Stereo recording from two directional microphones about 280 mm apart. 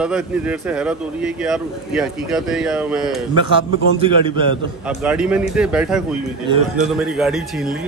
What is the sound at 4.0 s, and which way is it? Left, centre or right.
Speech, centre.